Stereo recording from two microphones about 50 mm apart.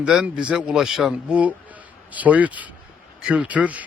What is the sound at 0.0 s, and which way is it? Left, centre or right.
Speech, centre.